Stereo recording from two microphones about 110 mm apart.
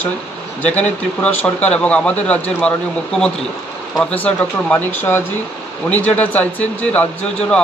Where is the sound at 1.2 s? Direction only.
15° left (ahead or behind).